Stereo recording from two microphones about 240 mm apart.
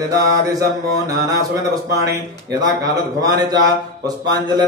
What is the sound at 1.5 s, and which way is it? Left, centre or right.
Speech, centre.